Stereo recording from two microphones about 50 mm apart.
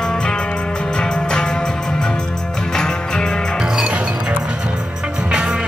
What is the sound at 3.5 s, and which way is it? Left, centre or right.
Music, centre.